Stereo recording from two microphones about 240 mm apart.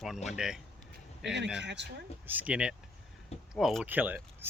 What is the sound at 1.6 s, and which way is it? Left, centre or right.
Speech, right.